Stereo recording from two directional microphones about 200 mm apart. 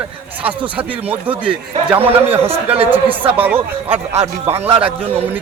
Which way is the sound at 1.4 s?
10° right (ahead or behind).